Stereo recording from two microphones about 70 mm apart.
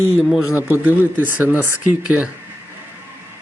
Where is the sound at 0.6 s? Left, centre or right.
Right.